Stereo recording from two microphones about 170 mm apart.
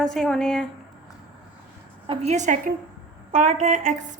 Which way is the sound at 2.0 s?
35° right (ahead or behind).